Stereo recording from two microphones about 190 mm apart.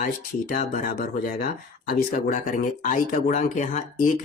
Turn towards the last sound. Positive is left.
turn(degrees=40)  # may be behind; listen again after turning